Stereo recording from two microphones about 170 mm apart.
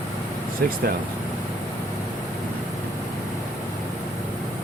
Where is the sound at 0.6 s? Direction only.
60° right (ahead or behind).